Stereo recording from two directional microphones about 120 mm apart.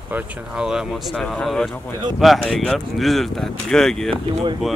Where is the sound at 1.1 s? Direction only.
5° left (ahead or behind).